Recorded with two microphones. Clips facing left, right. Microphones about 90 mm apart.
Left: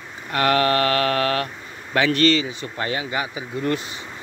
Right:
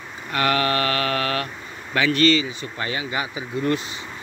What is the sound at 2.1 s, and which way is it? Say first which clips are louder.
Speech: right 1 dB; 55° left (ahead or behind).